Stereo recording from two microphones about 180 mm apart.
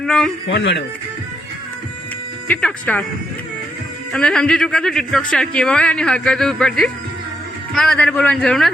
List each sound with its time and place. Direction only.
0.0 s a man's voice: 5° left (ahead or behind)
0.4 s speech: 90° left
2.5 s speech: 5° left (ahead or behind)
4.1 s speech: 5° left (ahead or behind)